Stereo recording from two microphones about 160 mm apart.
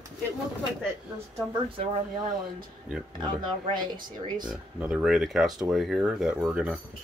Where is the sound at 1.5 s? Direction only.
30° right (ahead or behind).